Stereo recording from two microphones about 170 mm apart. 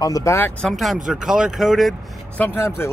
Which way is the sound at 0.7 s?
Centre (ahead or behind).